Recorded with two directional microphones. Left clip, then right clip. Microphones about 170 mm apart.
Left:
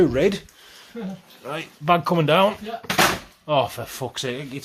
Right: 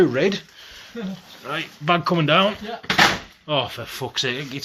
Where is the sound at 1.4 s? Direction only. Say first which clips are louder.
Left 1 dB; 25° left (ahead or behind).